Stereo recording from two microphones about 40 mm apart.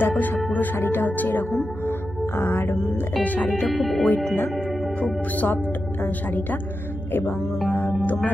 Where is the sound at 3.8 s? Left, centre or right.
Centre.